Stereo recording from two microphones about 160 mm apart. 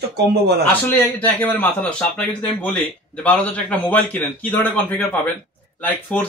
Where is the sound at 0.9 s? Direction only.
10° left (ahead or behind).